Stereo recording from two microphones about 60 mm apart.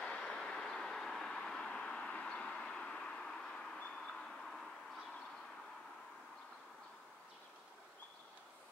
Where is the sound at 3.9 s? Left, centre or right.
Centre.